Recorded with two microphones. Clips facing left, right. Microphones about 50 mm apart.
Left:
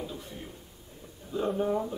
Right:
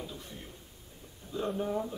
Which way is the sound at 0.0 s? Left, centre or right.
Centre.